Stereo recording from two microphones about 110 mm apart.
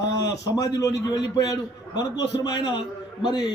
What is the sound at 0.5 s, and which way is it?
A man's voice, 35° left (ahead or behind).